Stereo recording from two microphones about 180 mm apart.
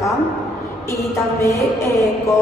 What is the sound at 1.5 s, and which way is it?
Speech, 15° left (ahead or behind).